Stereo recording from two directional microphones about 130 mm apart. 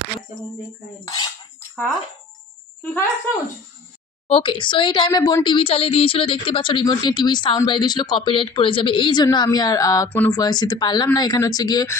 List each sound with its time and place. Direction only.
1.0 s cutlery: 30° left (ahead or behind)
2.8 s speech: 10° left (ahead or behind)
4.3 s speech: 40° left (ahead or behind)